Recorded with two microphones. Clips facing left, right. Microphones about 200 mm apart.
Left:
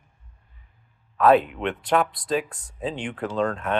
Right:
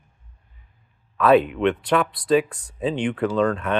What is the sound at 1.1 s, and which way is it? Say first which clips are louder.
Speech: right 2 dB; 75° right (ahead or behind).